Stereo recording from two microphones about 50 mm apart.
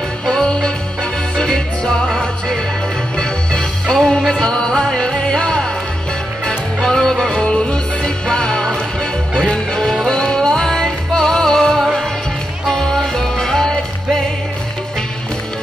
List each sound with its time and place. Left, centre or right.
0.2 s music: centre
6.8 s music: centre